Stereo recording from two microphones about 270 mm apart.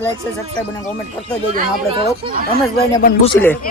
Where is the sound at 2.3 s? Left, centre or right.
Right.